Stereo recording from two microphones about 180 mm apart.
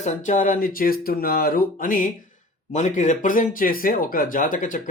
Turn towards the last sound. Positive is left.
turn(degrees=45)  # may be behind; listen again after turning